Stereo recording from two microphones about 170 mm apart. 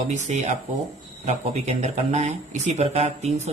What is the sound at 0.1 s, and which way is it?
Speech, 45° right (ahead or behind).